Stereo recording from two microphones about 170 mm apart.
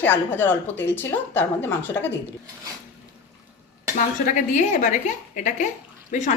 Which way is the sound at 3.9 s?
50° left (ahead or behind).